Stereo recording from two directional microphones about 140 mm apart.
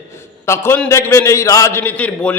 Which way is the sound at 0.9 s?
20° left (ahead or behind).